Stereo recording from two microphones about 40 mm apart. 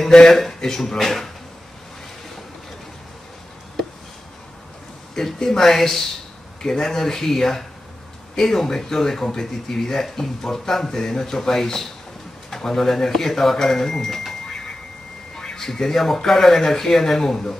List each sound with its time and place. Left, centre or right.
0.1 s speech: centre
5.1 s speech: centre